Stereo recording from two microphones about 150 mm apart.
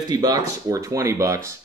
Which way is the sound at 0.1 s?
25° right (ahead or behind).